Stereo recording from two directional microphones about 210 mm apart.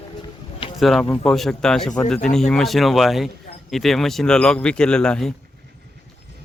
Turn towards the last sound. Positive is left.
turn(degrees=5)  # may be behind; listen again after turning